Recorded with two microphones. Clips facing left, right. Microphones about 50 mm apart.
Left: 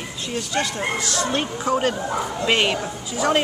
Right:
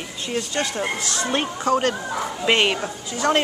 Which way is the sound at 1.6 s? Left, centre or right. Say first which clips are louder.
Right 1 dB; centre.